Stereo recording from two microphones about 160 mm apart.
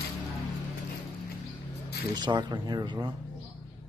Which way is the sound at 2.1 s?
30° right (ahead or behind).